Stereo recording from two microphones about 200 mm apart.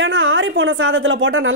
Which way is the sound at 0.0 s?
70° right (ahead or behind).